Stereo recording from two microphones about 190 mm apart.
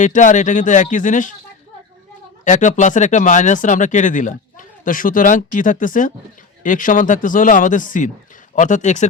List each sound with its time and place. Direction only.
0.0 s speech: 40° left (ahead or behind)
2.4 s speech: 40° left (ahead or behind)